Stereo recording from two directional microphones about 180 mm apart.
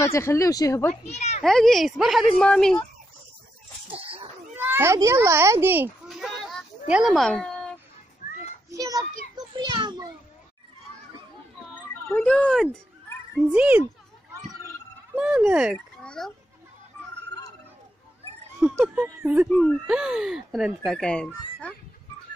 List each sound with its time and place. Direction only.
0.0 s speech: 15° left (ahead or behind)
1.0 s a child's voice: 40° left (ahead or behind)
1.4 s speech: centre (ahead or behind)
3.9 s a sound: 30° right (ahead or behind)
4.6 s a child's voice: 10° right (ahead or behind)
6.0 s a sound: centre (ahead or behind)
8.2 s children playing: 45° left (ahead or behind)
8.7 s children playing: 20° right (ahead or behind)
12.1 s speech: 5° left (ahead or behind)
13.5 s a child's voice: 10° right (ahead or behind)
15.1 s speech: 5° right (ahead or behind)
18.6 s speech: 15° right (ahead or behind); by 21.7 s 5° left (ahead or behind)